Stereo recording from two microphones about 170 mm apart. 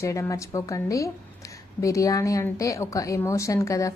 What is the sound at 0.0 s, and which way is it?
A woman's voice, 20° left (ahead or behind).